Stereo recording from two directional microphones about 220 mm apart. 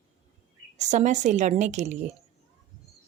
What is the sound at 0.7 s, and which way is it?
Speech, 35° right (ahead or behind).